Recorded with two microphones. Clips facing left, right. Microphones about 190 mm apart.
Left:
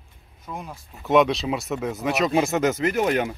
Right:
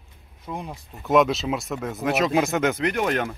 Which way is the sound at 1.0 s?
Centre (ahead or behind).